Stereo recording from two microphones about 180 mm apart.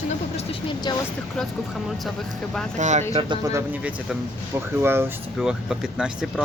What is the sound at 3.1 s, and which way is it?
Speech, 25° right (ahead or behind).